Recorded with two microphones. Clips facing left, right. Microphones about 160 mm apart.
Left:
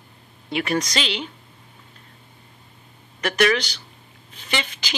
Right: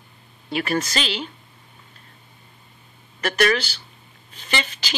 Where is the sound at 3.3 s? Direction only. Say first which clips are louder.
Left 1 dB; 15° left (ahead or behind).